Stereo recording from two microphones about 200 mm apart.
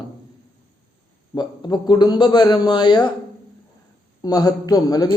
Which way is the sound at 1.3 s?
20° left (ahead or behind).